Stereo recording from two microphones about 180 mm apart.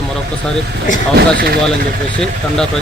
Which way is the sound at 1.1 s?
60° right (ahead or behind).